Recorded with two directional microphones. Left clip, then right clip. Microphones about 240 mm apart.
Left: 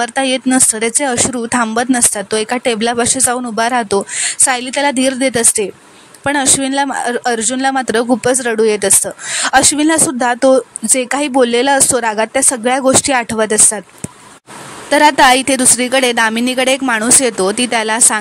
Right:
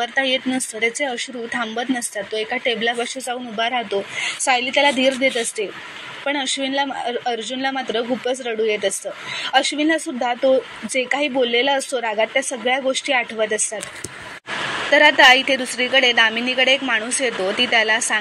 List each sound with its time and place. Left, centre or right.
0.0 s speech: left
14.9 s speech: left